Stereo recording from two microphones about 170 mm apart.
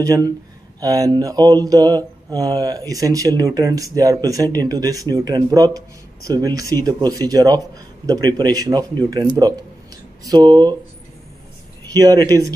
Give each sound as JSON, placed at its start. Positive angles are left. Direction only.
{"t": 0.0, "sound": "mantra", "side_deg": -20}
{"t": 11.9, "sound": "mantra", "side_deg": -25}